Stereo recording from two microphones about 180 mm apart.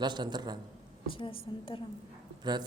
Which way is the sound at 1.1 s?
30° left (ahead or behind).